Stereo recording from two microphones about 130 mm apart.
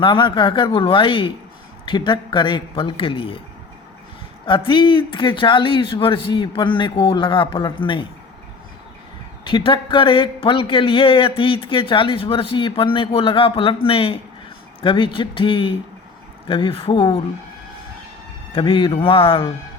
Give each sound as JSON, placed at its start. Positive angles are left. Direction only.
{"t": 0.0, "sound": "speech", "side_deg": 40}
{"t": 4.4, "sound": "speech", "side_deg": 40}
{"t": 9.5, "sound": "speech", "side_deg": 35}
{"t": 18.5, "sound": "speech", "side_deg": 40}